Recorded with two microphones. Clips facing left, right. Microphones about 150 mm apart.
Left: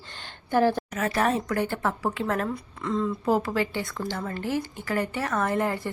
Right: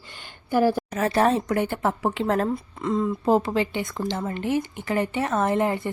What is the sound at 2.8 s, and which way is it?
A woman's voice, 20° right (ahead or behind).